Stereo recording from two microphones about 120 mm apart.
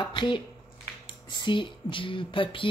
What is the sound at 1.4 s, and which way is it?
Speech, 45° left (ahead or behind).